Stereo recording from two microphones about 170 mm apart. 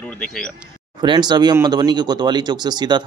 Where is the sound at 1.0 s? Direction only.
25° right (ahead or behind).